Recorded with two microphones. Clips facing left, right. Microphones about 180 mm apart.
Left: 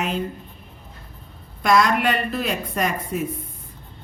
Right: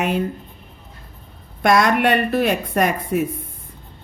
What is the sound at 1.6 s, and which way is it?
A woman's voice, 60° right (ahead or behind).